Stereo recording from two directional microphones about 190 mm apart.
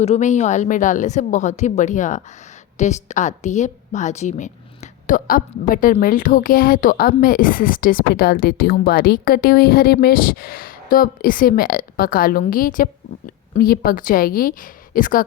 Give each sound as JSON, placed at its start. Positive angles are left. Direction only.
{"t": 0.0, "sound": "a woman's voice", "side_deg": 35}